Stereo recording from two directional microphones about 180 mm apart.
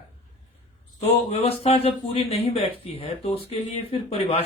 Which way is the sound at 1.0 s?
35° left (ahead or behind).